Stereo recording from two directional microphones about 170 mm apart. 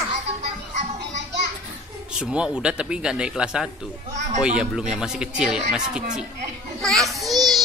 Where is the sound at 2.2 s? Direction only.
5° right (ahead or behind).